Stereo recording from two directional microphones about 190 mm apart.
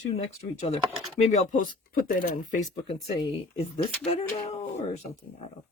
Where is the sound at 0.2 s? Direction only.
35° left (ahead or behind).